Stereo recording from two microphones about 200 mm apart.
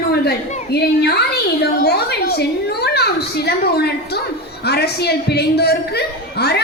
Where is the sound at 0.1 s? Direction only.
55° left (ahead or behind).